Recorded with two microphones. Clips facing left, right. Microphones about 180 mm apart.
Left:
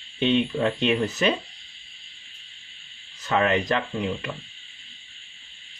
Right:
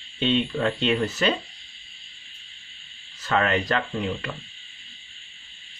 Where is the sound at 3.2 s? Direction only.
15° left (ahead or behind).